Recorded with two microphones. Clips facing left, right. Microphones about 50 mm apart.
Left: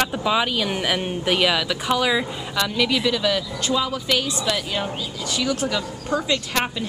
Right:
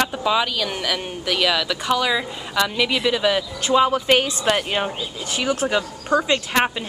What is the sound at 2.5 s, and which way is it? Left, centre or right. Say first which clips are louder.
A woman's voice: right 2 dB; centre.